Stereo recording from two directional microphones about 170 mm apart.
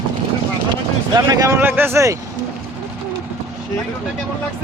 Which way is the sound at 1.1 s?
20° right (ahead or behind).